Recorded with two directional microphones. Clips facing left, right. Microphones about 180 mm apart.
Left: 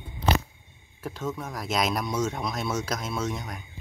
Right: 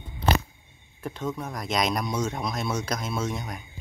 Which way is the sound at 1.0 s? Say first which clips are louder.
Right 1 dB; 5° left (ahead or behind).